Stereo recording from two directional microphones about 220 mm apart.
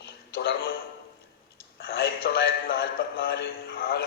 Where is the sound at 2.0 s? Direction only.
45° left (ahead or behind).